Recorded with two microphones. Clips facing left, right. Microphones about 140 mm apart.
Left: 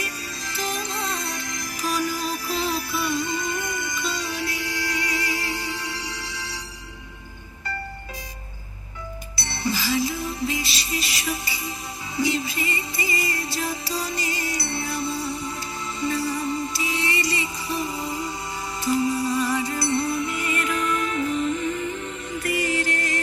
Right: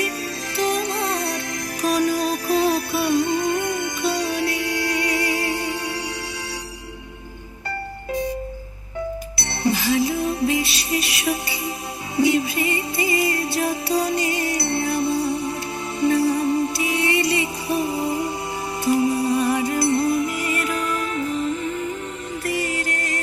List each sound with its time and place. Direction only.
0.5 s music: 65° right (ahead or behind)
9.3 s music: 60° right (ahead or behind); by 21.3 s 40° right (ahead or behind)
21.3 s music: centre (ahead or behind)
22.4 s music: 45° right (ahead or behind)